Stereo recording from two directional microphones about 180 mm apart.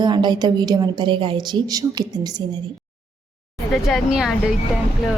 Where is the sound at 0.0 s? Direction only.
25° right (ahead or behind).